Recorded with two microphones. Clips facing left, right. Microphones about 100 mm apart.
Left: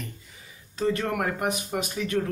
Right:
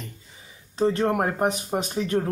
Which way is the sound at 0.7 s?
30° right (ahead or behind).